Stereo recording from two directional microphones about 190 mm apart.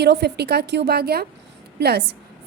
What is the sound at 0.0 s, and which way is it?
A woman's voice, 60° right (ahead or behind).